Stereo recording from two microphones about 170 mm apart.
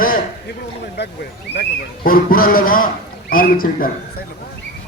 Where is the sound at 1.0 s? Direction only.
85° left.